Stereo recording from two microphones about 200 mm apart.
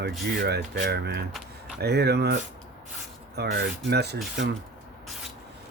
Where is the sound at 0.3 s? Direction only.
55° right (ahead or behind).